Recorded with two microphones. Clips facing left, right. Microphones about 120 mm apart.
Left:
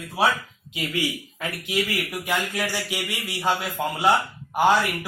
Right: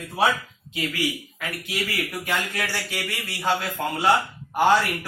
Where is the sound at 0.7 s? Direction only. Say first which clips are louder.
Even; 20° left (ahead or behind).